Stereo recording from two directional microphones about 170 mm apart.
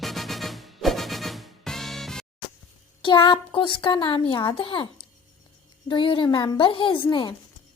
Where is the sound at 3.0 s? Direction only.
30° left (ahead or behind).